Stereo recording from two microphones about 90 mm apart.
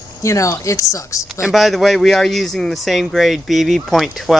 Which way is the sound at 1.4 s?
Centre (ahead or behind).